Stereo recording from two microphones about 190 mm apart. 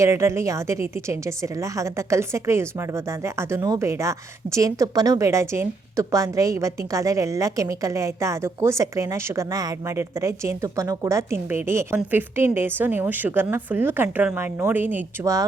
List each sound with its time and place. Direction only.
0.0 s a woman's voice: 15° right (ahead or behind)